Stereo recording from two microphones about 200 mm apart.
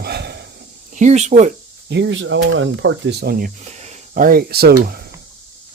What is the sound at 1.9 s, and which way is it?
Speech, 60° right (ahead or behind).